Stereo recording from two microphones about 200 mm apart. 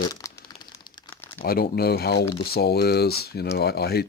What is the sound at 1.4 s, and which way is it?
Speech, 50° left (ahead or behind).